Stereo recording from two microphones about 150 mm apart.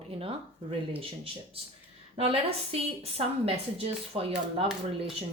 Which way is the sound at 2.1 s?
40° right (ahead or behind).